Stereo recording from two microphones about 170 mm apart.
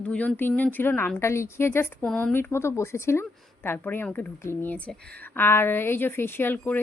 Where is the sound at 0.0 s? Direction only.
10° left (ahead or behind).